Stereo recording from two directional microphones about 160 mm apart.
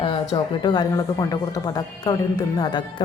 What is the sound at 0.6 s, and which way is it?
Speech, 30° left (ahead or behind).